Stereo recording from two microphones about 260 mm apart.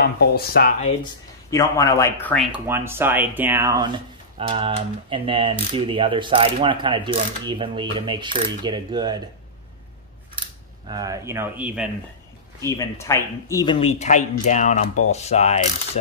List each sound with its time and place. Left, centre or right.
0.0 s speech: left
1.5 s speech: centre
10.9 s speech: centre
12.5 s speech: centre